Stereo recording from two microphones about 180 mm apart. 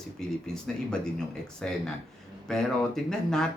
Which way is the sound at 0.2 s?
5° left (ahead or behind).